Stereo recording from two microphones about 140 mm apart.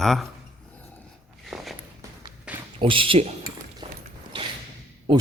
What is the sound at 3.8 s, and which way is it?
Walk, 40° right (ahead or behind).